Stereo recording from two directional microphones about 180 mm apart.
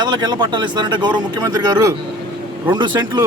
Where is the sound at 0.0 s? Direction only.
25° right (ahead or behind).